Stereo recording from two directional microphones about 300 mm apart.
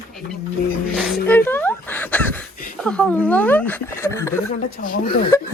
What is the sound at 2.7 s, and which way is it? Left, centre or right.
Speech, centre.